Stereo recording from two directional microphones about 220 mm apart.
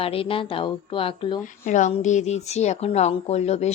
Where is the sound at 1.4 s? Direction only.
35° left (ahead or behind).